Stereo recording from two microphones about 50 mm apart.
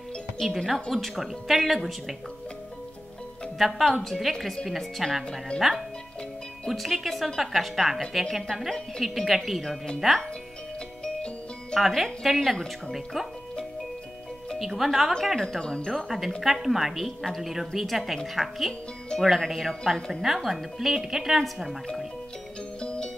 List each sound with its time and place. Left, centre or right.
0.4 s a woman's voice: centre
3.5 s a woman's voice: centre
11.8 s a woman's voice: centre
12.9 s a woman's voice: centre
14.6 s a woman's voice: centre
15.4 s speech: centre
15.9 s a woman's voice: centre
22.8 s music: centre